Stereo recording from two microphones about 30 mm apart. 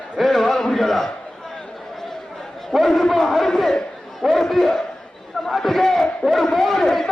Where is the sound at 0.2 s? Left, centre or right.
Centre.